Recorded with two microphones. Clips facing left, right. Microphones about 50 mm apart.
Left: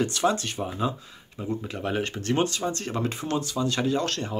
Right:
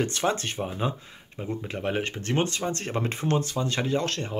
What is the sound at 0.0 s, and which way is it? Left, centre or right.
Speech, right.